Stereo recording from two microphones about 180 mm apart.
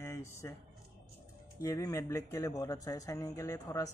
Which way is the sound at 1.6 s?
20° left (ahead or behind).